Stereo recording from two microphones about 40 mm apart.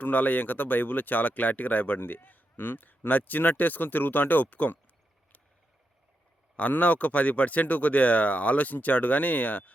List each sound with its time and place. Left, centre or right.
0.0 s speech: left
3.1 s speech: left
6.6 s speech: left